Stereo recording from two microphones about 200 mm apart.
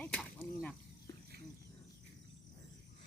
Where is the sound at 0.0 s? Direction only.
5° left (ahead or behind).